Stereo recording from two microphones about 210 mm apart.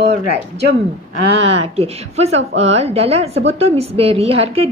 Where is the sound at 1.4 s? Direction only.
30° right (ahead or behind).